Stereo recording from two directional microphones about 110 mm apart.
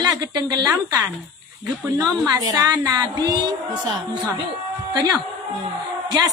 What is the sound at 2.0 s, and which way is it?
A woman's voice, 35° right (ahead or behind).